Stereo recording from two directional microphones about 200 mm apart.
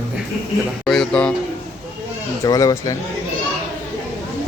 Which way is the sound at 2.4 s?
15° left (ahead or behind).